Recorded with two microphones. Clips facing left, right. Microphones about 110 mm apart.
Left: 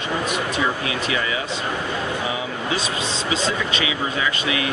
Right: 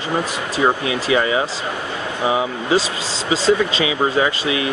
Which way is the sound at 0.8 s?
30° right (ahead or behind).